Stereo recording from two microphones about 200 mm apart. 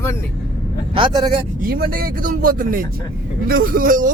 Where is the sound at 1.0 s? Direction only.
25° right (ahead or behind).